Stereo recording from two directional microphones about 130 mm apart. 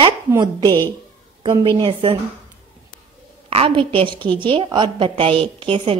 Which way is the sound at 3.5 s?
45° right (ahead or behind).